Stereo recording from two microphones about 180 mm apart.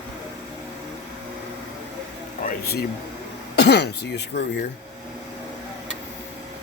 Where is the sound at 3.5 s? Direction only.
70° left (ahead or behind).